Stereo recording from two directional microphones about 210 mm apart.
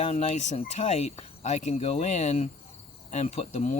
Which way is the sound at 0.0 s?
30° left (ahead or behind).